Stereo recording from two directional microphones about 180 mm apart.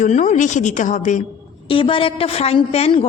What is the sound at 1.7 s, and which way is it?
A woman's voice, 30° left (ahead or behind).